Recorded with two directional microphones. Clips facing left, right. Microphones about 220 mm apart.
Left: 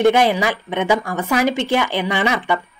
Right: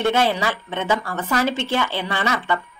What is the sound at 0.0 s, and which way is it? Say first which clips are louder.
A woman's voice: left 5 dB; 15° left (ahead or behind).